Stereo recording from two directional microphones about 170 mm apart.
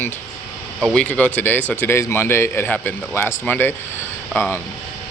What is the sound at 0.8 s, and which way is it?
A man's voice, 5° left (ahead or behind).